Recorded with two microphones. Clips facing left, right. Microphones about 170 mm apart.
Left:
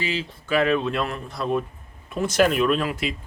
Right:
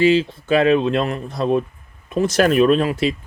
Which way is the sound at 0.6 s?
25° right (ahead or behind).